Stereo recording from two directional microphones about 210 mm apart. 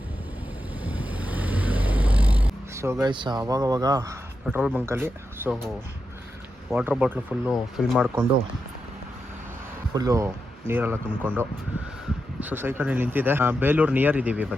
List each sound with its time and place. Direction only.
0.9 s vehicle: 5° right (ahead or behind)
3.5 s speech: 15° right (ahead or behind)
6.7 s speech: 5° right (ahead or behind)
9.9 s speech: 15° right (ahead or behind)